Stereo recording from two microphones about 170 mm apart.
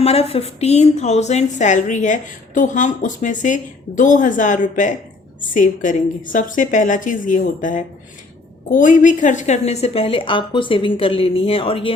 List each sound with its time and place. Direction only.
0.0 s a woman's voice: 35° left (ahead or behind)